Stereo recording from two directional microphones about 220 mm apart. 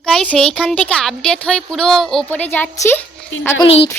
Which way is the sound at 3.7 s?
30° left (ahead or behind).